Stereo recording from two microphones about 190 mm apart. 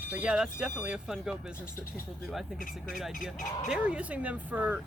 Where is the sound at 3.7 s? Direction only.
5° right (ahead or behind).